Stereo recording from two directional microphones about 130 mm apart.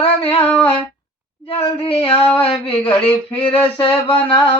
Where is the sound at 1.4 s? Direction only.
45° left (ahead or behind).